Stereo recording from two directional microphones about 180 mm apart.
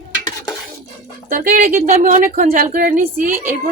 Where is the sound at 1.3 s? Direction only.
50° right (ahead or behind).